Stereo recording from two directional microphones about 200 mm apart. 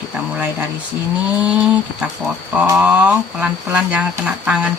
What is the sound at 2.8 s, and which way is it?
Speech, 5° right (ahead or behind).